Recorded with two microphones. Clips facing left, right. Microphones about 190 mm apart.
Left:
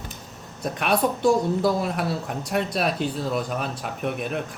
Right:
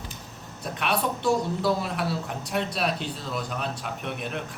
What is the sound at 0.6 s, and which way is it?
Speech, 45° left (ahead or behind).